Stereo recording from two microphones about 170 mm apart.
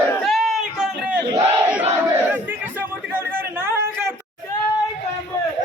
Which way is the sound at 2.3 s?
10° right (ahead or behind).